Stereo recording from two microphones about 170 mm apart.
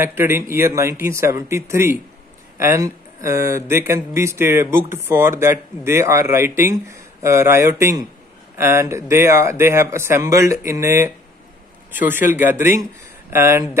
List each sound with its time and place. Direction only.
0.0 s speech: 15° right (ahead or behind)